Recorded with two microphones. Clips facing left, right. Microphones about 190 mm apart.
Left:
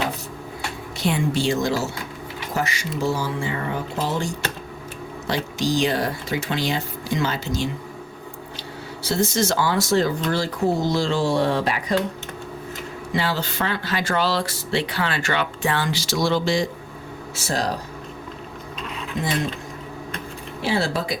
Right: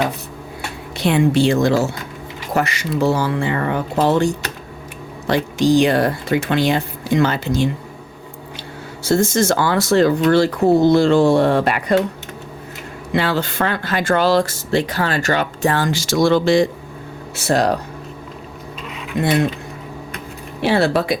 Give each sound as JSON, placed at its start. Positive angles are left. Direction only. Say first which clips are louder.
{"t": 0.9, "sound": "speech", "louder": "right 8 dB", "side_deg": -65}
{"t": 5.3, "sound": "speech", "louder": "right 8 dB", "side_deg": -55}
{"t": 9.0, "sound": "speech", "louder": "right 6 dB", "side_deg": -50}
{"t": 13.1, "sound": "speech", "louder": "right 6 dB", "side_deg": -60}
{"t": 19.2, "sound": "speech", "louder": "right 9 dB", "side_deg": -65}
{"t": 20.6, "sound": "speech", "louder": "right 7 dB", "side_deg": -65}